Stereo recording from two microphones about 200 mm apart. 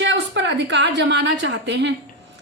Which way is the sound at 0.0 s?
65° right (ahead or behind).